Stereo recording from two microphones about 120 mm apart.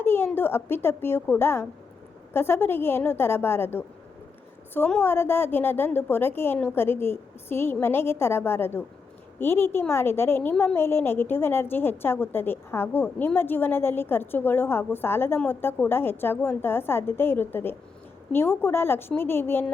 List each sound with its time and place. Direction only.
0.0 s a sound: 20° left (ahead or behind)
0.3 s a woman's voice: 20° left (ahead or behind)
4.9 s a woman's voice: 15° left (ahead or behind)